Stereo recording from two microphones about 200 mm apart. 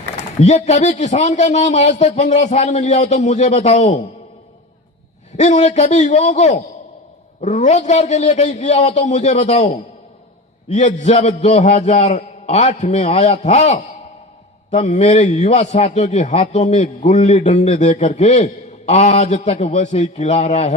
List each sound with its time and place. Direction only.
0.3 s a man's voice: 35° left (ahead or behind)
5.4 s a man's voice: 35° left (ahead or behind)